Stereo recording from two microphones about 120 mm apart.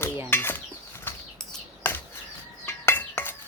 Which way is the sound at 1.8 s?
20° left (ahead or behind).